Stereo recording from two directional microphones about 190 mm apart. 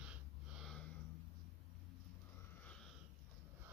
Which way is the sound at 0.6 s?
Centre (ahead or behind).